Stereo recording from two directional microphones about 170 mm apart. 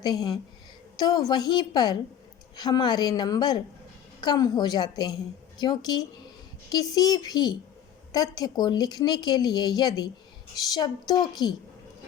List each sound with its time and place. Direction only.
0.0 s a woman's voice: 25° left (ahead or behind)